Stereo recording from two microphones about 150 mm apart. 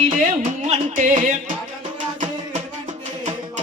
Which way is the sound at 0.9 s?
60° right (ahead or behind).